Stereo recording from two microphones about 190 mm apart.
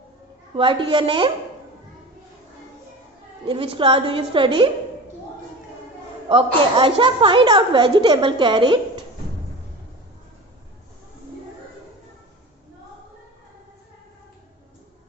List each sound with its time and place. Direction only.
0.5 s a woman's voice: 25° right (ahead or behind)
3.4 s a woman's voice: 25° right (ahead or behind)
6.2 s a woman's voice: 25° right (ahead or behind)